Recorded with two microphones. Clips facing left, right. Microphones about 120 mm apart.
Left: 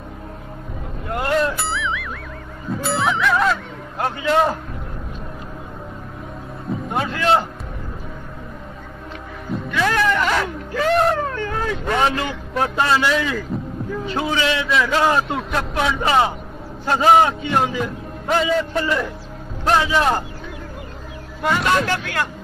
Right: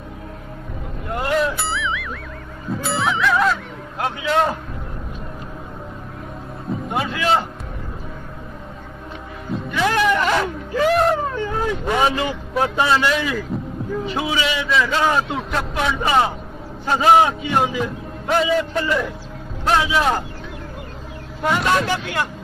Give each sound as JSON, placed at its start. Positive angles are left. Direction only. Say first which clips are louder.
{"t": 1.1, "sound": "music", "louder": "even", "side_deg": 0}
{"t": 4.0, "sound": "a man's voice", "louder": "left 1 dB", "side_deg": 0}
{"t": 6.7, "sound": "a man's voice", "louder": "even", "side_deg": 0}
{"t": 9.8, "sound": "speech", "louder": "right 1 dB", "side_deg": -15}
{"t": 10.7, "sound": "a sound", "louder": "right 1 dB", "side_deg": -10}
{"t": 11.1, "sound": "speech", "louder": "right 1 dB", "side_deg": -10}
{"t": 14.7, "sound": "a man's voice", "louder": "even", "side_deg": 0}
{"t": 21.4, "sound": "a man's voice", "louder": "even", "side_deg": 0}